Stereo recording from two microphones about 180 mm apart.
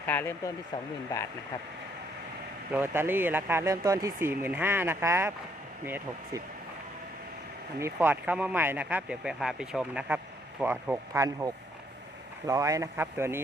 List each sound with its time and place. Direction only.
0.1 s speech: 15° left (ahead or behind)
2.7 s speech: 10° right (ahead or behind)
7.8 s speech: 15° right (ahead or behind)